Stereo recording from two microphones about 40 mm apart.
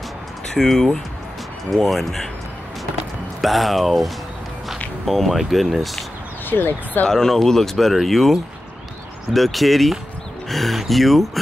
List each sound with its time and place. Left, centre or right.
0.6 s speech: centre
3.3 s speech: centre
6.5 s speech: left
7.1 s speech: centre